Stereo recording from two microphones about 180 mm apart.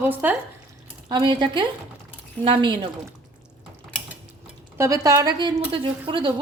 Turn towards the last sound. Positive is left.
turn(degrees=-30)  # may be behind; listen again after turning